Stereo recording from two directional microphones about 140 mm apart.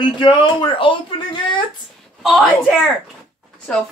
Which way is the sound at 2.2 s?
Centre (ahead or behind).